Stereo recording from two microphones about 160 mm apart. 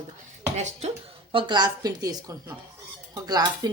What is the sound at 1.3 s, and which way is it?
A woman's voice, 30° right (ahead or behind).